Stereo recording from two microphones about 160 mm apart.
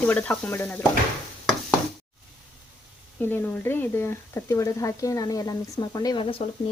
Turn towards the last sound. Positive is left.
turn(degrees=30)  # may be behind; listen again after turning